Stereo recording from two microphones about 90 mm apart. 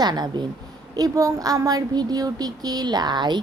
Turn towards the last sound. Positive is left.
turn(degrees=-55)  # may be behind; listen again after turning